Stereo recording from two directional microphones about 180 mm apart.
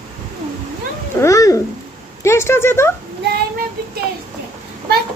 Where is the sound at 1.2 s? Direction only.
15° left (ahead or behind).